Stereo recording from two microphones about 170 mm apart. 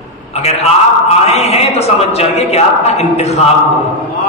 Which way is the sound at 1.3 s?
40° left (ahead or behind).